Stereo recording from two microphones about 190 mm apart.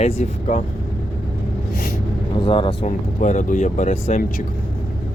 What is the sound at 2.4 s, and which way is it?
Speech, 25° left (ahead or behind).